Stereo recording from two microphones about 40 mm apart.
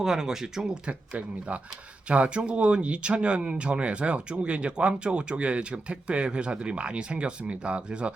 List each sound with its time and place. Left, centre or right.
0.0 s speech: centre
0.9 s speech: right